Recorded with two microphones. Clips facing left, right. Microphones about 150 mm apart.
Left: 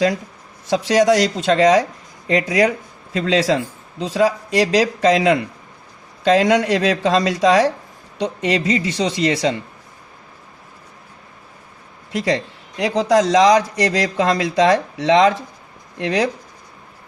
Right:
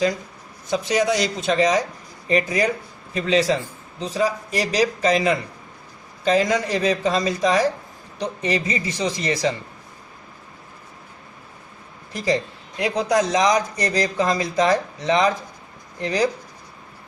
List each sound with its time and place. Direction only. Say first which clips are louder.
0.7 s speech: left 6 dB; 85° left
8.2 s a man's voice: left 4 dB; 75° left (ahead or behind)
12.1 s a man's voice: left 2 dB; 75° left (ahead or behind)
13.0 s a man's voice: left 6 dB; 90° left; by 16.3 s 75° left (ahead or behind)